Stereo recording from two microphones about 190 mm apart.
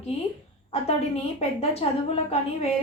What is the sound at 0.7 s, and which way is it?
A woman's voice, 35° left (ahead or behind).